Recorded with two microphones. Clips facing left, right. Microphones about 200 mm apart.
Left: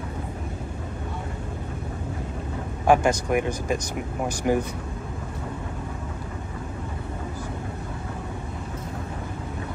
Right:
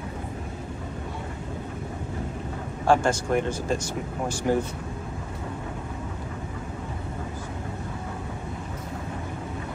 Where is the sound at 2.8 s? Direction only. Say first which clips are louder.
Left 2 dB; 15° left (ahead or behind).